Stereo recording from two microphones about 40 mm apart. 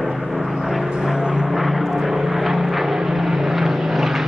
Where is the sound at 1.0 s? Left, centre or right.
Centre.